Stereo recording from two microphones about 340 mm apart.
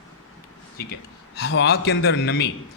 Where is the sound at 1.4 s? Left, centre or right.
Left.